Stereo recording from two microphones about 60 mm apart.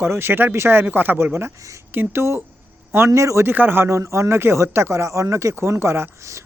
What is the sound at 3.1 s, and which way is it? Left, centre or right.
Speech, right.